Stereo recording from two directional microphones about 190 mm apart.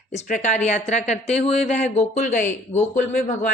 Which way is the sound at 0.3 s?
40° left (ahead or behind).